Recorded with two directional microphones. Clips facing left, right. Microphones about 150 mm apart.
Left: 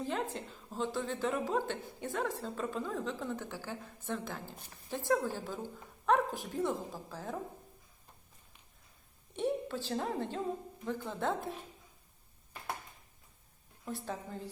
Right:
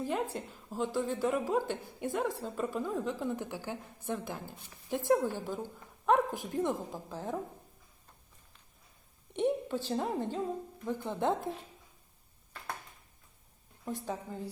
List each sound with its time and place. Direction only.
0.0 s a woman's voice: 10° right (ahead or behind)
9.3 s a woman's voice: 15° right (ahead or behind)
13.8 s a woman's voice: 15° right (ahead or behind)